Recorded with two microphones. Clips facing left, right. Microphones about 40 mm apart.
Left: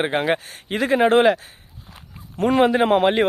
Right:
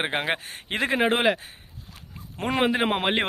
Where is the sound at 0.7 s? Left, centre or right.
Right.